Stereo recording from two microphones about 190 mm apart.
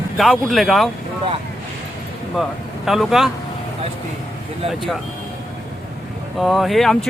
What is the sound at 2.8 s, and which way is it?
Speech, centre (ahead or behind).